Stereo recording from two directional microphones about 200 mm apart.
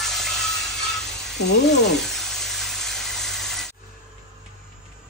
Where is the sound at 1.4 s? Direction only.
60° left (ahead or behind).